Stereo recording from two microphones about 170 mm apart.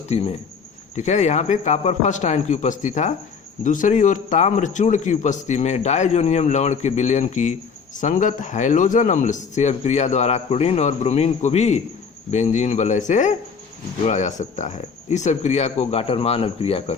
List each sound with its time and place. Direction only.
0.1 s a man's voice: 35° left (ahead or behind)